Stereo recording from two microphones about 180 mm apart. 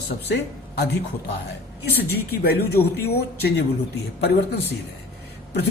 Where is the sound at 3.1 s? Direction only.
65° left (ahead or behind).